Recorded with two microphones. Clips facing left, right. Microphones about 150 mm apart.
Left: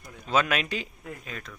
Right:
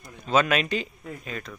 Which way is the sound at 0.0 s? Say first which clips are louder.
Right 3 dB; 10° left (ahead or behind).